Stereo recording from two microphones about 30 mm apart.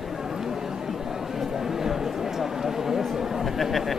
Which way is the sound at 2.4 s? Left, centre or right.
Centre.